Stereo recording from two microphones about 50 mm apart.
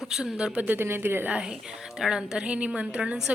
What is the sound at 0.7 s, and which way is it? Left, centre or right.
Speech, right.